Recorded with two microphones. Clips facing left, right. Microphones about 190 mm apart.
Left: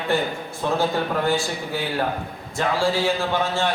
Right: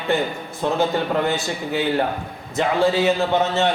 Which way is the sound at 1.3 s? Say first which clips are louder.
Even; 20° right (ahead or behind).